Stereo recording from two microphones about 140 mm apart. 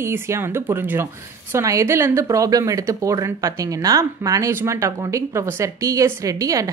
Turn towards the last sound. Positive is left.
turn(degrees=-25)  # may be behind; listen again after turning